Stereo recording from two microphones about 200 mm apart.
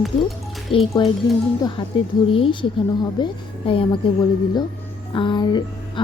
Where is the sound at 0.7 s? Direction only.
30° left (ahead or behind).